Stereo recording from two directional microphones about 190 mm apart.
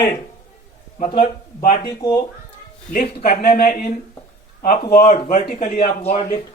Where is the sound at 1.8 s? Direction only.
20° left (ahead or behind).